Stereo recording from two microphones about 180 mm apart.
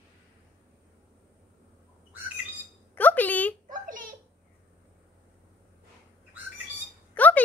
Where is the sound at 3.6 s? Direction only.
50° right (ahead or behind).